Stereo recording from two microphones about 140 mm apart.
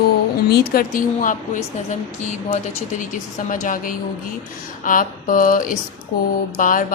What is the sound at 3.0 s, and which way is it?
A woman's voice, 70° left (ahead or behind).